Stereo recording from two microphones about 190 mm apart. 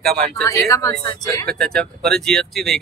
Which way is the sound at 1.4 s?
5° left (ahead or behind).